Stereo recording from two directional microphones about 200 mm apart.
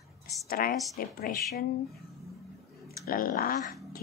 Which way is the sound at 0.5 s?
45° left (ahead or behind).